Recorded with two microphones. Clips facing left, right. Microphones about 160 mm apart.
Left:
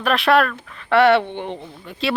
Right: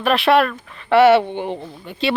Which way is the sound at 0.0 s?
Centre (ahead or behind).